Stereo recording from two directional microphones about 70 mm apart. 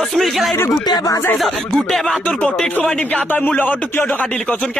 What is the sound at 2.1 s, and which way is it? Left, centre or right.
Speech, centre.